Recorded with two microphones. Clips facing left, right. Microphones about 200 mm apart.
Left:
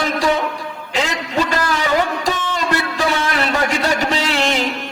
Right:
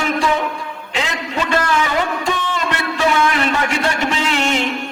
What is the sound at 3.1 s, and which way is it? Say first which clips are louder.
A man's voice: right 2 dB; 35° left (ahead or behind).